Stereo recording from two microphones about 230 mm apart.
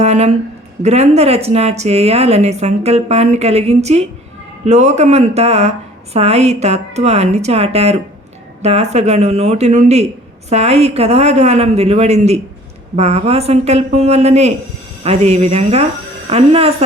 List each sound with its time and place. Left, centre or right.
0.0 s speech: right